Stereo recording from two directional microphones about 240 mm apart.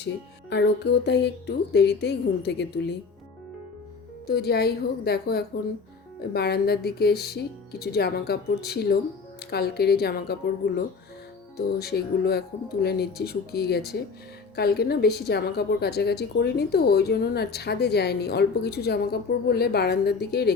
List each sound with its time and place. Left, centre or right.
0.5 s a woman's voice: left
4.3 s a woman's voice: left
11.5 s a woman's voice: left